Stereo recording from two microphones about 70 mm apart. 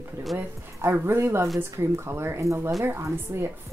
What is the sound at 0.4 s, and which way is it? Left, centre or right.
Speech, right.